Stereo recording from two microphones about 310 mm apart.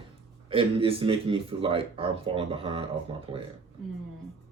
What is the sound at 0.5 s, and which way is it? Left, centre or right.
Speech, centre.